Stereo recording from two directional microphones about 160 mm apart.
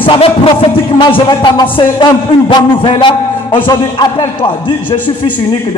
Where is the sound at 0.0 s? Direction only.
35° left (ahead or behind).